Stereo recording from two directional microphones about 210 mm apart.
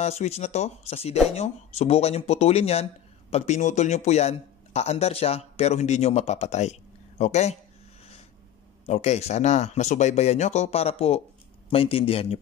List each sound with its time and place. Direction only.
0.0 s speech: 30° left (ahead or behind)
8.8 s speech: 30° left (ahead or behind)